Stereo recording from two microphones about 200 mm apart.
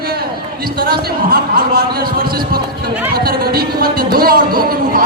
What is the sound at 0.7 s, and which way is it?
Speech, 45° right (ahead or behind).